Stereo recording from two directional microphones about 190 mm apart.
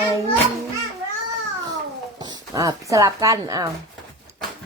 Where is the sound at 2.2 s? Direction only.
20° right (ahead or behind).